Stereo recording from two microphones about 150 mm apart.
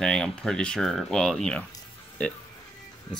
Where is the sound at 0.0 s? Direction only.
5° left (ahead or behind).